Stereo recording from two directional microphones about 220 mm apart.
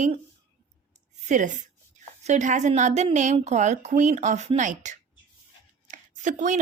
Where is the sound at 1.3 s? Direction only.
35° right (ahead or behind).